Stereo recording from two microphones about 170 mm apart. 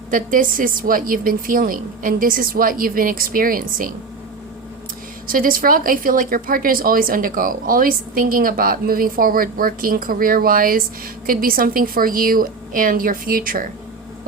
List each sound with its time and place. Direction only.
0.1 s a woman's voice: 55° right (ahead or behind)
5.3 s a woman's voice: 55° right (ahead or behind)